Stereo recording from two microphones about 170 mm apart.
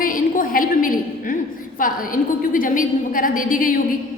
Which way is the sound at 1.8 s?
55° left (ahead or behind).